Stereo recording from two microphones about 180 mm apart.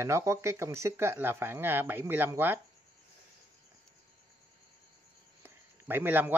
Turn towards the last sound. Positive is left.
turn(degrees=-10)  # may be behind; listen again after turning